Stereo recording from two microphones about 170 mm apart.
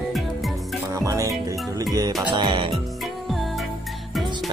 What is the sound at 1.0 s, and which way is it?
Music, 20° right (ahead or behind).